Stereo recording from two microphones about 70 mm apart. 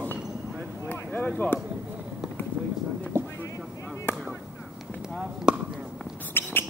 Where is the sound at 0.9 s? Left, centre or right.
Left.